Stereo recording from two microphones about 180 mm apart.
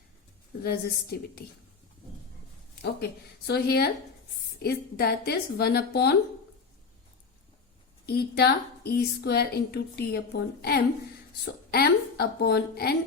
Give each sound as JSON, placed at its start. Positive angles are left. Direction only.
{"t": 0.6, "sound": "a woman's voice", "side_deg": 60}
{"t": 2.8, "sound": "a woman's voice", "side_deg": 65}
{"t": 8.0, "sound": "a woman's voice", "side_deg": 60}